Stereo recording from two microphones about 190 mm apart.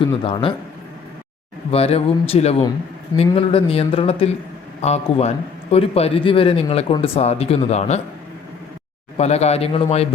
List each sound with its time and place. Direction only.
0.2 s speech: 30° left (ahead or behind)
1.7 s speech: 30° left (ahead or behind)
9.1 s speech: 35° left (ahead or behind)